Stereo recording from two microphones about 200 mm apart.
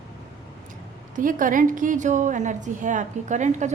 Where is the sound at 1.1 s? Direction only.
40° right (ahead or behind).